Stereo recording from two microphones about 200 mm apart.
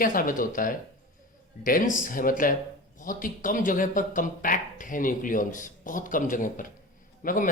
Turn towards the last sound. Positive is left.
turn(degrees=45)  # may be behind; listen again after turning